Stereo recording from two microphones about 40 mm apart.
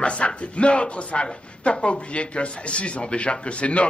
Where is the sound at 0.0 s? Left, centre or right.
Left.